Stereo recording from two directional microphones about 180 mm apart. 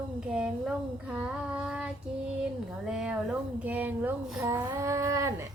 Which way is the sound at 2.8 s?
5° right (ahead or behind).